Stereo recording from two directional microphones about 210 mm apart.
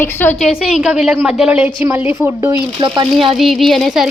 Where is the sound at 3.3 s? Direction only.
Centre (ahead or behind).